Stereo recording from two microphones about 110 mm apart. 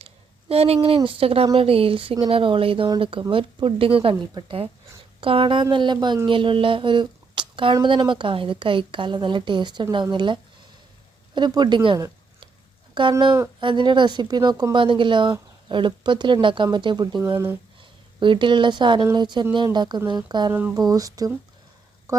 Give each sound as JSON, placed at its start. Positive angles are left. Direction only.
{"t": 0.0, "sound": "speech", "side_deg": -65}
{"t": 4.1, "sound": "speech", "side_deg": -40}
{"t": 5.2, "sound": "speech", "side_deg": -55}
{"t": 11.3, "sound": "speech", "side_deg": -40}
{"t": 20.5, "sound": "speech", "side_deg": -15}
{"t": 20.7, "sound": "speech", "side_deg": -35}
{"t": 22.1, "sound": "a sound", "side_deg": -30}